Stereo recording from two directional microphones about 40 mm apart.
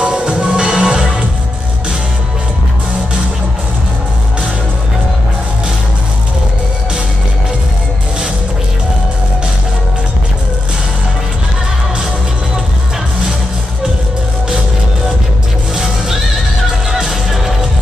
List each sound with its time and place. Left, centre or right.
0.0 s music: right
15.7 s music: centre